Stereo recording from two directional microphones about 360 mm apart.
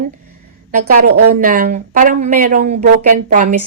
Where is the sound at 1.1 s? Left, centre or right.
Right.